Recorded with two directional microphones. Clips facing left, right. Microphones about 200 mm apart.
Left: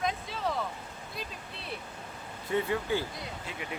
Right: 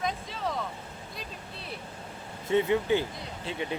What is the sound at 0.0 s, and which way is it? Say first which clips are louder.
Vehicle: even; centre (ahead or behind).